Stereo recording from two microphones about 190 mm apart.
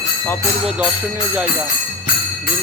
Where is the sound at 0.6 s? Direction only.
5° right (ahead or behind).